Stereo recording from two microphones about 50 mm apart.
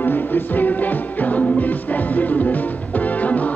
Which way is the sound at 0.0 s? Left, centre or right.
Left.